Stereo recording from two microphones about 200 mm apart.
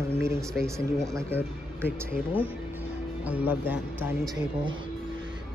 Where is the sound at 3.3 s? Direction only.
10° right (ahead or behind).